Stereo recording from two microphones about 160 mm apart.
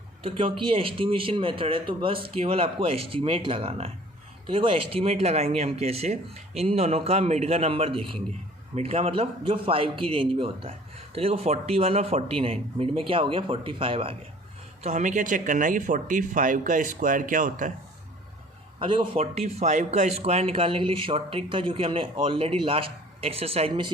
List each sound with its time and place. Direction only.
0.2 s a man's voice: 35° right (ahead or behind)
14.8 s speech: 50° right (ahead or behind)
18.8 s a man's voice: 30° right (ahead or behind)